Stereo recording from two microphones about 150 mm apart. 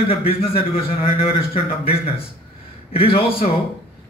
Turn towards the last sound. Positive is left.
turn(degrees=40)  # may be behind; listen again after turning